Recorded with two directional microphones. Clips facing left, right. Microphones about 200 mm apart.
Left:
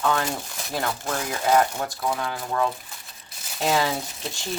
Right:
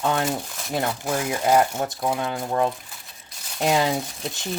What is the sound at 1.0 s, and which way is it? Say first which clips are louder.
Speech: right 3 dB; 10° right (ahead or behind).